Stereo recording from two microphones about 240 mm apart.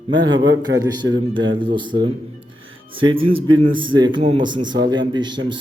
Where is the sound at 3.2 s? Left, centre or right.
Right.